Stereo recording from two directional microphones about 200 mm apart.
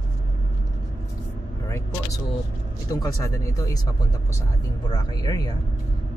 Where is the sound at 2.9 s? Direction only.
20° left (ahead or behind).